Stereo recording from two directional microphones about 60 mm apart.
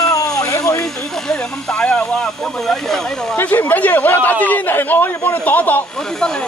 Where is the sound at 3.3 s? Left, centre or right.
Left.